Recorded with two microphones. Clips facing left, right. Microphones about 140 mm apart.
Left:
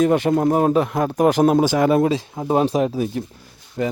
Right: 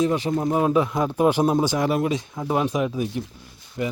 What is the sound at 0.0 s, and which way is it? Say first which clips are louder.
Speech: left 5 dB; 65° left (ahead or behind).